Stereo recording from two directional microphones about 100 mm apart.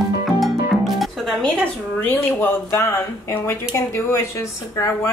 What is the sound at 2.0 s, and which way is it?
Speech, 20° left (ahead or behind).